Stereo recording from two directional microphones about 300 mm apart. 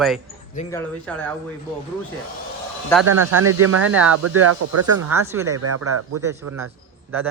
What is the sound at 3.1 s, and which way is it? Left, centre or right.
Speech, right.